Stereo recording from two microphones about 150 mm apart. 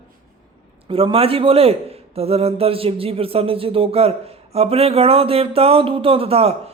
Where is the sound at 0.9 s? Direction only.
35° right (ahead or behind).